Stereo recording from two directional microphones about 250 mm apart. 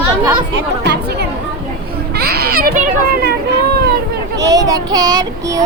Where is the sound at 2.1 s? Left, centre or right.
Right.